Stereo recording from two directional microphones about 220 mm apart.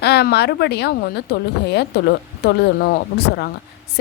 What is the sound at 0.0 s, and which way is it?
A woman's voice, 50° left (ahead or behind).